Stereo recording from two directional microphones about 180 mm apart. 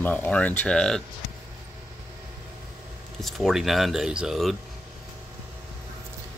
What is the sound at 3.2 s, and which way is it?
Speech, centre (ahead or behind).